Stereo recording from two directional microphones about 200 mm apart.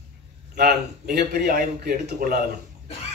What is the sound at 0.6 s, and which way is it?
A man's voice, 50° right (ahead or behind).